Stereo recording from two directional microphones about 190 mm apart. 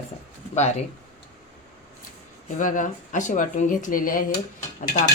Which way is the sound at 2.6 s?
45° left (ahead or behind).